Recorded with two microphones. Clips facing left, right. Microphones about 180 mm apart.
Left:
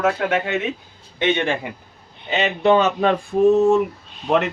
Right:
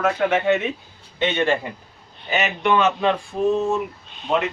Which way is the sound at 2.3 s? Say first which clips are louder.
Left 4 dB; 30° left (ahead or behind).